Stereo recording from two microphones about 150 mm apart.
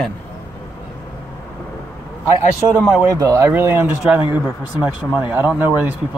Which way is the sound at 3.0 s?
20° right (ahead or behind).